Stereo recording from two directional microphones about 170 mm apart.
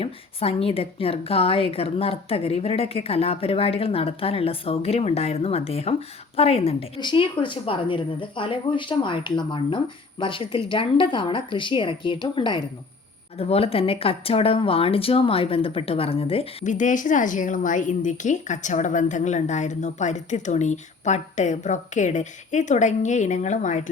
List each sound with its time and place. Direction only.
0.0 s a woman's voice: 35° left (ahead or behind)